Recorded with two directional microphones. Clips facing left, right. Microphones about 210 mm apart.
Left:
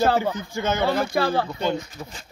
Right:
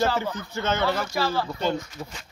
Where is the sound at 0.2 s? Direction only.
15° left (ahead or behind).